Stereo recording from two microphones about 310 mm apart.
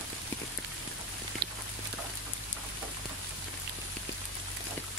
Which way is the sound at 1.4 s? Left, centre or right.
Right.